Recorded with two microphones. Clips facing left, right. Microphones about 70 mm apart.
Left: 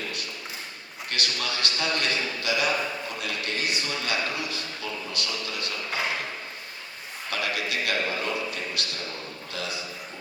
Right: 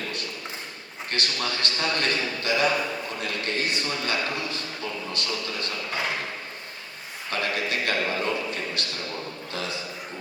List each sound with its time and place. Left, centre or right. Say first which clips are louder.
1.1 s a man's voice: right 2 dB; right
7.3 s a man's voice: right 2 dB; right
9.5 s a man's voice: right 1 dB; right